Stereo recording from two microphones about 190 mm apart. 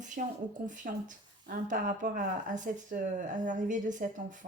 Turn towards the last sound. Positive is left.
turn(degrees=-40)  # may be behind; listen again after turning